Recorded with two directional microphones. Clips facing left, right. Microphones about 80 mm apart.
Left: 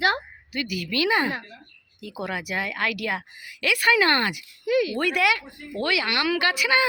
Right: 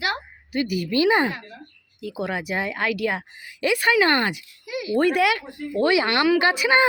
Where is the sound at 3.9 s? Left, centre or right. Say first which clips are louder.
Right 1 dB; centre.